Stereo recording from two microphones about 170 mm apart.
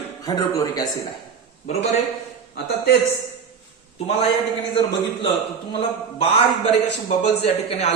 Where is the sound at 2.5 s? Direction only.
75° left (ahead or behind).